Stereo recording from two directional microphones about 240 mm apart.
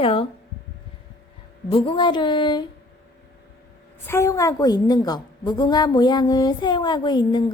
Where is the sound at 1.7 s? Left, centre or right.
Left.